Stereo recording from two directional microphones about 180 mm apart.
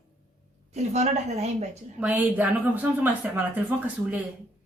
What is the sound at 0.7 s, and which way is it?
Speech, 40° right (ahead or behind).